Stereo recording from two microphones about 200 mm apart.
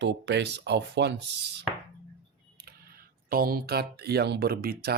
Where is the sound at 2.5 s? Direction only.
50° right (ahead or behind).